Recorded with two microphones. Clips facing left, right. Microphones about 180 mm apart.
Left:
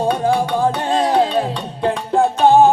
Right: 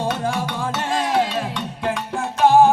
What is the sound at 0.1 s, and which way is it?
Music, 30° left (ahead or behind).